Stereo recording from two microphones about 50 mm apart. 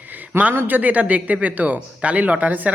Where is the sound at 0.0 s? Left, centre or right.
Right.